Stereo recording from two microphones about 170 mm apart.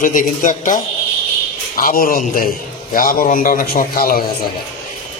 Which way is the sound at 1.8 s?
55° left (ahead or behind).